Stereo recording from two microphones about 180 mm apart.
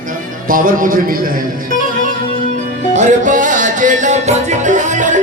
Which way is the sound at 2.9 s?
40° right (ahead or behind).